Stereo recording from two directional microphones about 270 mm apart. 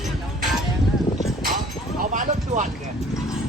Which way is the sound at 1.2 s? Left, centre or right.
Centre.